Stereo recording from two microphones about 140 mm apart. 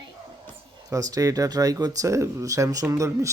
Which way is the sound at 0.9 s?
25° right (ahead or behind).